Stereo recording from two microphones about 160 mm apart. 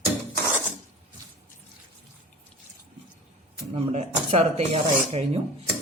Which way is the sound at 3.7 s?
40° right (ahead or behind).